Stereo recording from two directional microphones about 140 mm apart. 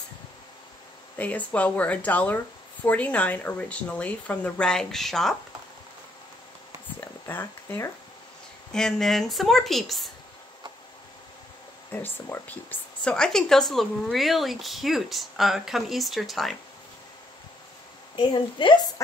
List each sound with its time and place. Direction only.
1.1 s speech: 10° left (ahead or behind)
7.2 s speech: 15° left (ahead or behind)
8.7 s a woman's voice: 5° left (ahead or behind)
11.9 s a woman's voice: 15° left (ahead or behind)
18.1 s a woman's voice: 35° left (ahead or behind)